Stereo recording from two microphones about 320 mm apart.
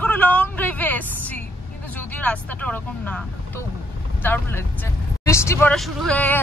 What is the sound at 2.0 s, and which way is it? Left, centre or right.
Speech, centre.